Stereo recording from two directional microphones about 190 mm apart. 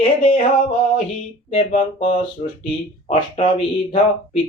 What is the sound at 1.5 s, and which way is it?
Mantra, 30° left (ahead or behind).